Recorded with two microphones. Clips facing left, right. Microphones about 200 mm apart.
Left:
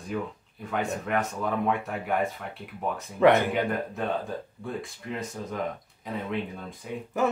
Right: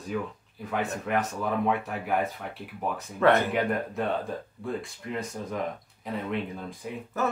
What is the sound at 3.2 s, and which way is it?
Speech, 15° left (ahead or behind).